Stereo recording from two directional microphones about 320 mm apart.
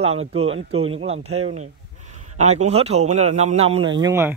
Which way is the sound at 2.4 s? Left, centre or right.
Right.